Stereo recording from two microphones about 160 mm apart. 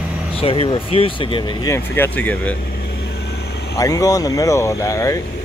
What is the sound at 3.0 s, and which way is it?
Vehicle, 90° left.